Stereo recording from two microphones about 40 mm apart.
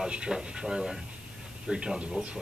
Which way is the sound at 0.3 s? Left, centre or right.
Centre.